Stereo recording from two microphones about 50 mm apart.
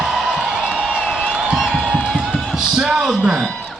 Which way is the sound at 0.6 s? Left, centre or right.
Centre.